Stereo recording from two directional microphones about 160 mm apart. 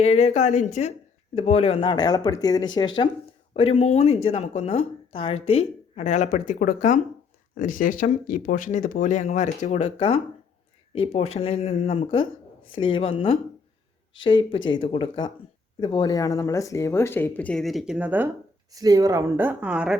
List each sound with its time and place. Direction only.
0.0 s speech: 40° left (ahead or behind)
3.5 s a woman's voice: 40° left (ahead or behind); by 18.3 s 10° right (ahead or behind)
18.7 s speech: 20° right (ahead or behind); by 20.0 s 5° right (ahead or behind)